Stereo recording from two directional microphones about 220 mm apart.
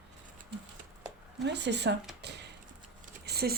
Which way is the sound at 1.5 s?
50° right (ahead or behind).